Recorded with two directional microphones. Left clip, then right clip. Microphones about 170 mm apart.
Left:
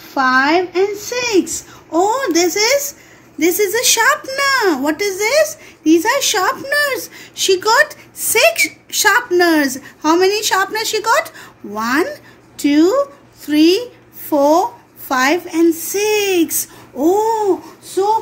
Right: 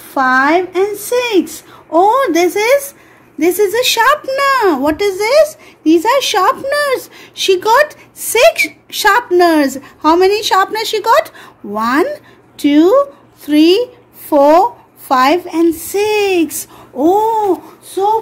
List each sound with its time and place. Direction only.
0.1 s a woman's voice: 45° right (ahead or behind)